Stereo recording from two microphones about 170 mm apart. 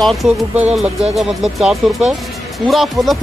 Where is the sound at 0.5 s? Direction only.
5° right (ahead or behind).